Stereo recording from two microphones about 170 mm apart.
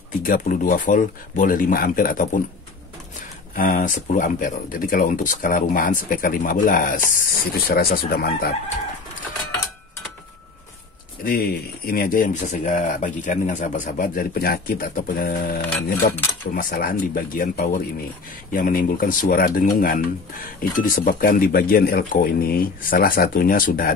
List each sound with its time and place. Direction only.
0.2 s speech: 50° left (ahead or behind)
3.5 s speech: 55° left (ahead or behind)
11.2 s speech: 60° left (ahead or behind)